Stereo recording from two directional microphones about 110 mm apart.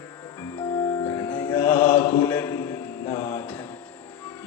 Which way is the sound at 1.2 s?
10° left (ahead or behind).